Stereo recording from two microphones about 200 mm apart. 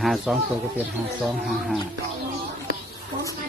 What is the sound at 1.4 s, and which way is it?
Speech, centre (ahead or behind).